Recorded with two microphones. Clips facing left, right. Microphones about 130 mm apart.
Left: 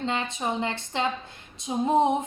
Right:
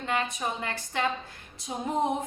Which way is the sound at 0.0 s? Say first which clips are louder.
Left 1 dB; 25° left (ahead or behind).